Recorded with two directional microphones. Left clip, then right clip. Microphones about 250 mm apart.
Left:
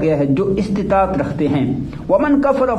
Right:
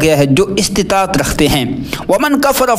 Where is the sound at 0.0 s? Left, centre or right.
Right.